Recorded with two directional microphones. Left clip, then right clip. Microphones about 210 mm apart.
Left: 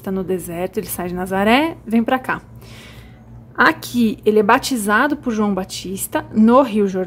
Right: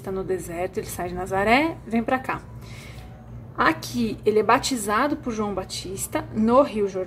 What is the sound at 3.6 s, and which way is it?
A woman's voice, 35° left (ahead or behind).